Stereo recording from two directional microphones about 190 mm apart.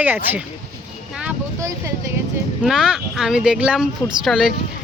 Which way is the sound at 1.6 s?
15° right (ahead or behind).